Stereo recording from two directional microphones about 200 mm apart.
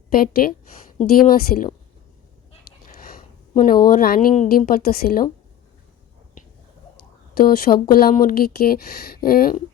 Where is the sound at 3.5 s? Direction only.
45° left (ahead or behind).